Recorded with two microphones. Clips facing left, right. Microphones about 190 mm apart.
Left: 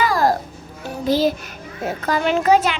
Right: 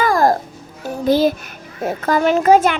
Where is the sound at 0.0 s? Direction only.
50° right (ahead or behind).